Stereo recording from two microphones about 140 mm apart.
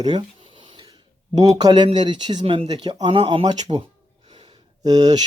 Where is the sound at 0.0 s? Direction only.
35° right (ahead or behind).